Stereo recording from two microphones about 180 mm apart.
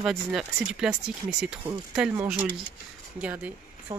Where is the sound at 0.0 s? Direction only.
Centre (ahead or behind).